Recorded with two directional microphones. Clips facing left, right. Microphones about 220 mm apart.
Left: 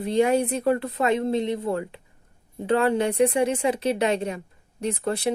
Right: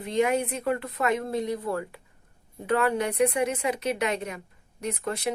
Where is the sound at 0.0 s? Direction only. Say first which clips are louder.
Left 4 dB; 35° left (ahead or behind).